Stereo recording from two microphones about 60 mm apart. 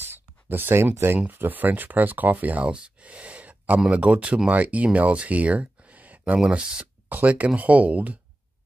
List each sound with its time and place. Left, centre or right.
0.0 s a sound: right
1.2 s speech: right
6.4 s speech: centre
7.1 s speech: right